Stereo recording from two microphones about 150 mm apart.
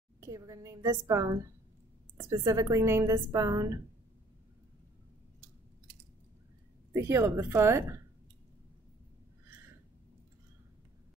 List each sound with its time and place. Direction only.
0.2 s a woman's voice: 20° right (ahead or behind)
6.9 s speech: 20° right (ahead or behind)